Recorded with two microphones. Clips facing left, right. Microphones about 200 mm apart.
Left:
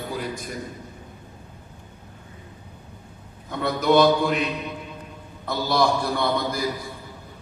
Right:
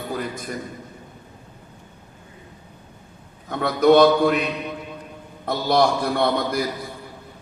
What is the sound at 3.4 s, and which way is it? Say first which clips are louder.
Speech: right 5 dB; 55° right (ahead or behind).